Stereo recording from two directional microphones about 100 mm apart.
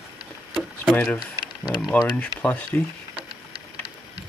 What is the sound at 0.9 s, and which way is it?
Speech, 15° left (ahead or behind).